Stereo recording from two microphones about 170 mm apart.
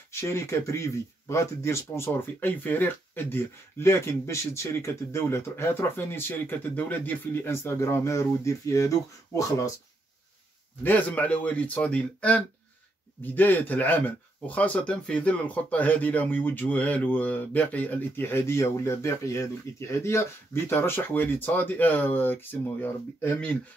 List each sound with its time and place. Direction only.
0.1 s speech: 15° left (ahead or behind)
10.8 s speech: 10° left (ahead or behind)